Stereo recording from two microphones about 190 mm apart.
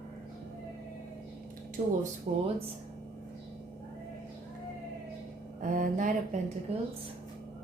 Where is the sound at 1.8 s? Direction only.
40° right (ahead or behind).